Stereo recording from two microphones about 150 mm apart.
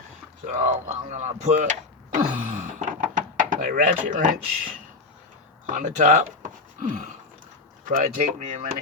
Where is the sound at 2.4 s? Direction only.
60° right (ahead or behind).